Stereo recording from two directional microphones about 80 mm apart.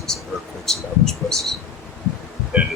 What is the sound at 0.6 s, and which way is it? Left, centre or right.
Speech, centre.